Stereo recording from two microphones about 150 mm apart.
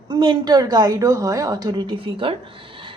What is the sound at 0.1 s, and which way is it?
A woman's voice, 30° right (ahead or behind).